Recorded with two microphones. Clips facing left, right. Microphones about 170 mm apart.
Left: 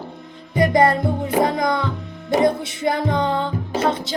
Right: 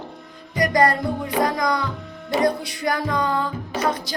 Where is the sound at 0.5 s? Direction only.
25° left (ahead or behind).